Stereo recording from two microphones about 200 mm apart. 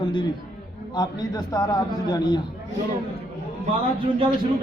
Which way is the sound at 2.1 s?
20° left (ahead or behind).